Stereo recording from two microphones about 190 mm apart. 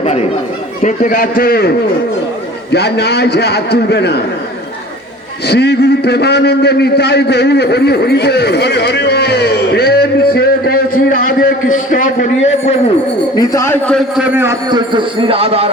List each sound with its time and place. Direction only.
0.0 s chatter: 35° left (ahead or behind)
0.8 s a man's voice: 45° left (ahead or behind)
2.7 s a man's voice: 60° left (ahead or behind)
5.5 s a man's voice: 60° left (ahead or behind); by 12.7 s 35° left (ahead or behind)
13.3 s a man's voice: 20° left (ahead or behind)
14.2 s a man's voice: 10° right (ahead or behind)
14.7 s a man's voice: 25° right (ahead or behind)